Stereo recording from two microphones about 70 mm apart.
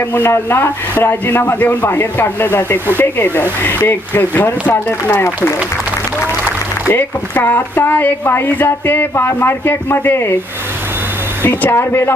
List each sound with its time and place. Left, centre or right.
0.1 s speech: left
6.8 s speech: left
11.7 s speech: left